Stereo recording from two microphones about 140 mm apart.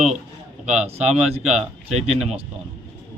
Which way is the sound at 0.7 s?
10° right (ahead or behind).